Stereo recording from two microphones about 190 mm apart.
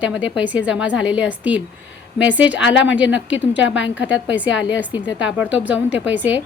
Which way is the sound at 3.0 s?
75° left (ahead or behind).